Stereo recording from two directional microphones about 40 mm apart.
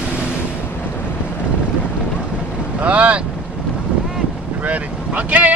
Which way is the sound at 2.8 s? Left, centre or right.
Right.